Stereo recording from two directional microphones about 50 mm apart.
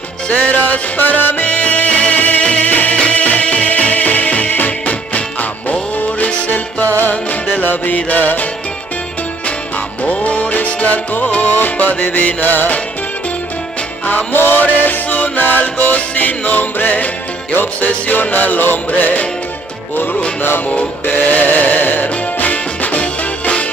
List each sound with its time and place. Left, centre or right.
0.4 s music: left
10.0 s music: left
14.3 s music: left
20.4 s music: left